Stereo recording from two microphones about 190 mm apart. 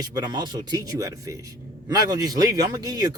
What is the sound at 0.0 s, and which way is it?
A man's voice, 20° right (ahead or behind).